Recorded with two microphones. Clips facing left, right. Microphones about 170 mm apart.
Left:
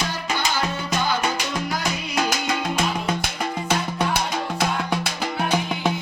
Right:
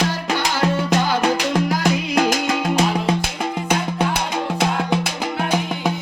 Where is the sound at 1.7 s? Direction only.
60° right (ahead or behind).